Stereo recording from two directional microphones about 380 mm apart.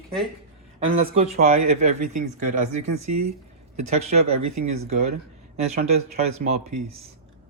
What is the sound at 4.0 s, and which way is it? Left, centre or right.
Speech, centre.